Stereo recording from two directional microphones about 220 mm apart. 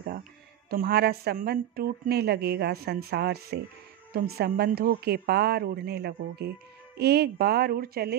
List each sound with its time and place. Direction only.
0.7 s a woman's voice: 45° right (ahead or behind)